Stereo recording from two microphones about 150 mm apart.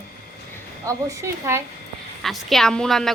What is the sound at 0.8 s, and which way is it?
Speech, 20° right (ahead or behind).